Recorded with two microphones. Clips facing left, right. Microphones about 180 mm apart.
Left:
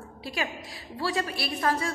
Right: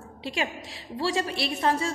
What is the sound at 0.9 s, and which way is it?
Speech, 30° right (ahead or behind).